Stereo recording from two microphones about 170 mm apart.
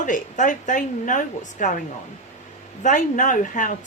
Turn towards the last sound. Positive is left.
turn(degrees=50)  # may be behind; listen again after turning